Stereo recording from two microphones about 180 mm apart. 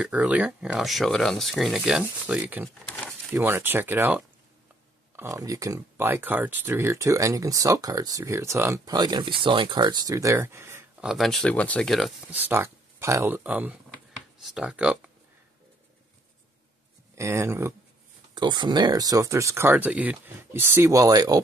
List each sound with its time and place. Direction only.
0.0 s speech: 10° right (ahead or behind)
2.8 s a sound: 10° left (ahead or behind)
3.3 s speech: 10° right (ahead or behind)
12.4 s speech: 10° right (ahead or behind)
17.1 s speech: 15° right (ahead or behind)
18.3 s speech: 25° right (ahead or behind)